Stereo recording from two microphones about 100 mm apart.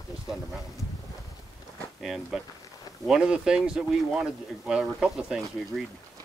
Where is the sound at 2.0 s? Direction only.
5° right (ahead or behind).